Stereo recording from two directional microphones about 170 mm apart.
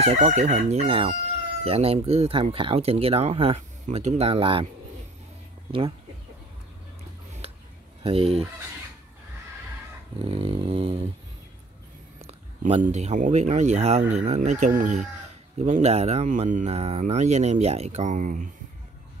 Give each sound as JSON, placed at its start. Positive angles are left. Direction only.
{"t": 0.0, "sound": "speech", "side_deg": -40}
{"t": 8.0, "sound": "speech", "side_deg": -35}
{"t": 10.2, "sound": "speech", "side_deg": -35}
{"t": 12.3, "sound": "a sound", "side_deg": -40}
{"t": 12.9, "sound": "speech", "side_deg": -45}